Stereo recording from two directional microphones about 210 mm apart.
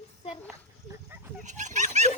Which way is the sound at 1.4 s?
35° right (ahead or behind).